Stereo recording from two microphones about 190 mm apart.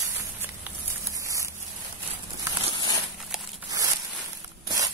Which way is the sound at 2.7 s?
20° left (ahead or behind).